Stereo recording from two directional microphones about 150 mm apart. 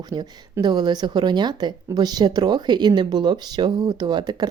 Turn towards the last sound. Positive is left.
turn(degrees=-30)  # may be behind; listen again after turning